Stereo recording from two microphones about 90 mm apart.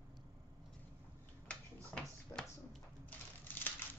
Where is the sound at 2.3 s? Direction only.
30° left (ahead or behind).